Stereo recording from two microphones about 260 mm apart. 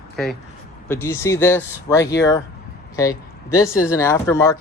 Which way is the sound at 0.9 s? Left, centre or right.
Centre.